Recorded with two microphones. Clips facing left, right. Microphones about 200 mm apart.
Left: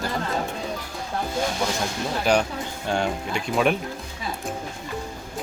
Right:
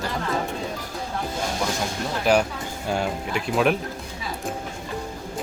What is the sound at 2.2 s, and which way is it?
Speech, 5° right (ahead or behind).